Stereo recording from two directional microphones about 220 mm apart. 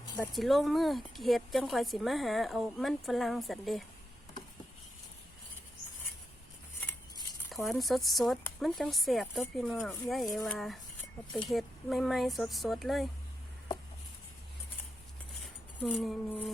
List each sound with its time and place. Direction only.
0.2 s speech: centre (ahead or behind)
6.7 s cutlery: 10° left (ahead or behind)
11.4 s speech: centre (ahead or behind)
15.8 s speech: centre (ahead or behind)